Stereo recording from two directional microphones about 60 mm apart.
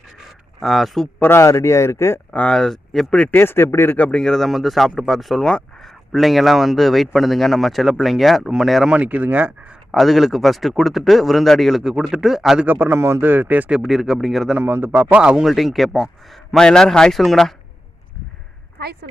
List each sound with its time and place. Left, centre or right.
0.6 s speech: centre
1.2 s a man's voice: left
2.3 s speech: left
2.6 s speech: centre
3.3 s speech: left
3.9 s speech: left
4.2 s speech: centre
8.9 s speech: right
9.9 s speech: centre
11.8 s speech: centre
12.6 s speech: right
13.8 s speech: centre
14.6 s speech: right
15.4 s speech: centre